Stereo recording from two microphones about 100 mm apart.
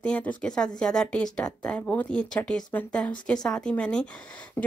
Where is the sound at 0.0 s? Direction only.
10° left (ahead or behind).